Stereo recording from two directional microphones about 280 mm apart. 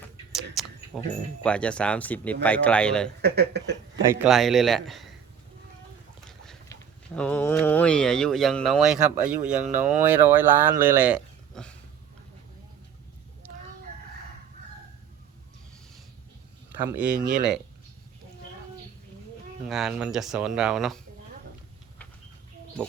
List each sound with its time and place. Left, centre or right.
0.6 s a sound: centre
0.9 s speech: centre
3.2 s speech: right
4.1 s speech: centre
6.2 s a sound: centre
7.2 s speech: centre
16.9 s speech: centre
19.6 s speech: centre